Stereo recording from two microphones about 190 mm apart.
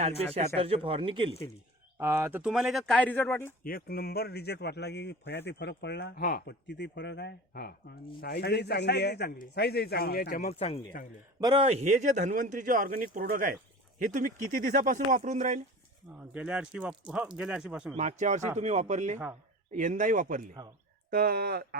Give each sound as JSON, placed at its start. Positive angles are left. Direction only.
{"t": 0.3, "sound": "speech", "side_deg": -30}
{"t": 2.0, "sound": "speech", "side_deg": -15}
{"t": 3.6, "sound": "speech", "side_deg": 50}
{"t": 10.6, "sound": "speech", "side_deg": 30}
{"t": 11.3, "sound": "speech", "side_deg": -20}
{"t": 11.7, "sound": "speech", "side_deg": -35}
{"t": 16.1, "sound": "speech", "side_deg": -5}
{"t": 17.9, "sound": "speech", "side_deg": -40}